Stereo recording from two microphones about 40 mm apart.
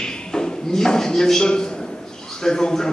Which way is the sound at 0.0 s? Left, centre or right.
Centre.